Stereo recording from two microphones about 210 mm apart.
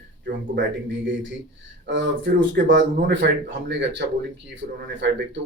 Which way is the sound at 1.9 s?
60° right (ahead or behind).